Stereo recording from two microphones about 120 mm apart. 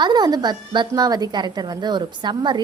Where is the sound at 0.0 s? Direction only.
35° right (ahead or behind).